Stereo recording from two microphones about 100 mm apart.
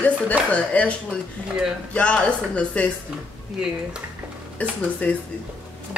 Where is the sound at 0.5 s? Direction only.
15° left (ahead or behind).